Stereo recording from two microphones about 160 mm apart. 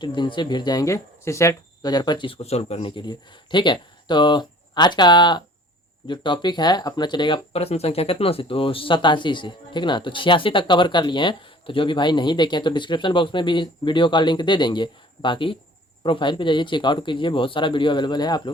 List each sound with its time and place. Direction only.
0.0 s speech: 30° left (ahead or behind)